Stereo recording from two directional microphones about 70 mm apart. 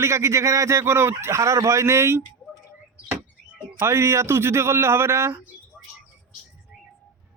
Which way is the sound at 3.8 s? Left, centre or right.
Right.